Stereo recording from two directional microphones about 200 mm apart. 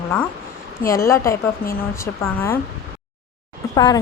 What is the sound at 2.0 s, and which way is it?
Speech, 15° left (ahead or behind).